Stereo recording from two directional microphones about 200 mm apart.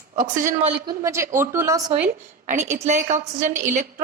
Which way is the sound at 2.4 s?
40° right (ahead or behind).